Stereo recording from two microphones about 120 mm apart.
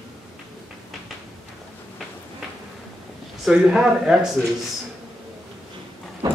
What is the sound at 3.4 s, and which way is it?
Speech, 5° right (ahead or behind).